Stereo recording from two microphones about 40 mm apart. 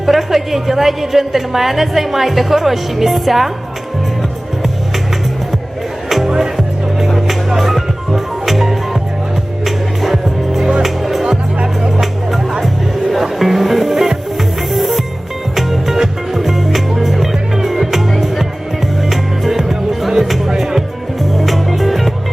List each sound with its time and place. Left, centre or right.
0.0 s a woman's voice: centre
6.1 s music: centre
11.2 s music: right
11.9 s music: centre
19.1 s music: centre
21.3 s music: centre